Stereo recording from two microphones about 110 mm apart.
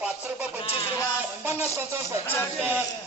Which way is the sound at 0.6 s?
60° left (ahead or behind).